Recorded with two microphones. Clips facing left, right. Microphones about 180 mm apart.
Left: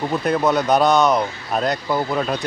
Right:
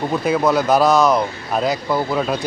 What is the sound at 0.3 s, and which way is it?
Speech, centre (ahead or behind).